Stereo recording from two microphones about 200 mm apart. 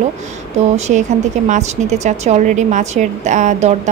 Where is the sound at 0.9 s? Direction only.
40° right (ahead or behind).